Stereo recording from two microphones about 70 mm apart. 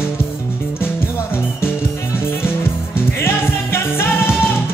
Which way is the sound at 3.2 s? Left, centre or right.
Left.